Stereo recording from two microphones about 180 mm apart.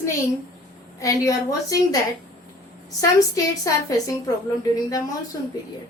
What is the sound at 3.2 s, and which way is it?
A woman's voice, 20° left (ahead or behind).